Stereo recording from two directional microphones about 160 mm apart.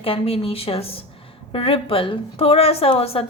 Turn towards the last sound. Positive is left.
turn(degrees=35)  # may be behind; listen again after turning